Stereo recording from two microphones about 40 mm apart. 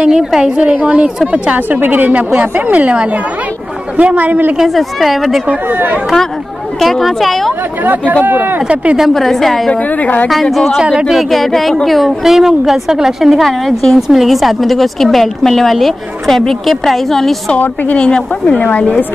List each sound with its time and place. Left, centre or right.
0.0 s a woman's voice: centre
0.6 s a woman's voice: right
4.6 s speech: centre
6.8 s speech: centre
8.1 s a woman's voice: right
9.1 s speech: centre
12.2 s a woman's voice: centre
13.5 s a woman's voice: centre
13.9 s speech: centre
17.9 s a woman's voice: left